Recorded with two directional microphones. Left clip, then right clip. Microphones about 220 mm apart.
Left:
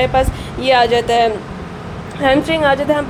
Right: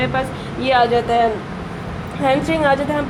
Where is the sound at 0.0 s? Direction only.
50° left (ahead or behind).